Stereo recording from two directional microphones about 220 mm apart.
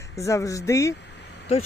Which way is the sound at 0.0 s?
15° left (ahead or behind).